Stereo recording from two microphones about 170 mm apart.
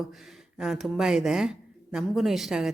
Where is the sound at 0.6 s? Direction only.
Centre (ahead or behind).